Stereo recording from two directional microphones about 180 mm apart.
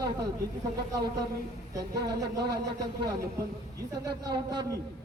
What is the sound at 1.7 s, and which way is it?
Speech, 20° right (ahead or behind).